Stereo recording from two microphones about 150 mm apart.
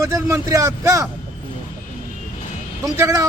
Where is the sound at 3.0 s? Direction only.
20° right (ahead or behind).